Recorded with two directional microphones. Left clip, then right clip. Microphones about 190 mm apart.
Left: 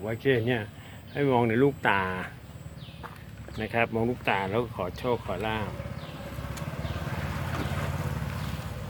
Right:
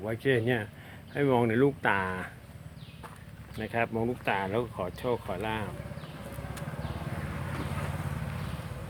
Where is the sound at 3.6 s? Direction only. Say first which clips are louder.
Left 3 dB; 5° right (ahead or behind).